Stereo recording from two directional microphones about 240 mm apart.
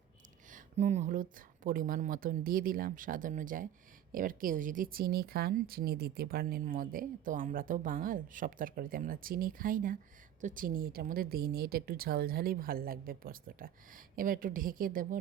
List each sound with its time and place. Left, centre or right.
0.5 s speech: right